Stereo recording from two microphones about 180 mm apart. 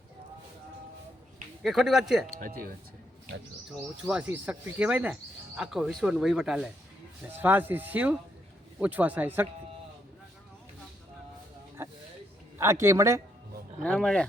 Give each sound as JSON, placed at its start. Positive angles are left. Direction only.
{"t": 1.6, "sound": "speech", "side_deg": 0}
{"t": 2.4, "sound": "speech", "side_deg": -50}
{"t": 3.7, "sound": "speech", "side_deg": -5}
{"t": 11.8, "sound": "a sound", "side_deg": -15}
{"t": 12.5, "sound": "speech", "side_deg": -15}
{"t": 13.8, "sound": "speech", "side_deg": 5}